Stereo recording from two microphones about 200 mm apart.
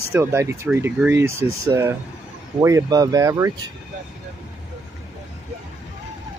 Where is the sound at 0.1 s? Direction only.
15° right (ahead or behind).